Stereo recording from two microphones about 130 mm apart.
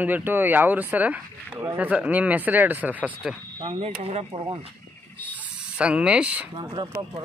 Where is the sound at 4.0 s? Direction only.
50° right (ahead or behind).